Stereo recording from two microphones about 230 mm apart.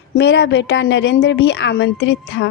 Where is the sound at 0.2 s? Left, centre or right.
Left.